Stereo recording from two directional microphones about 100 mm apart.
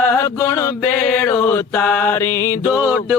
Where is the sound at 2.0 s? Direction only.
25° left (ahead or behind).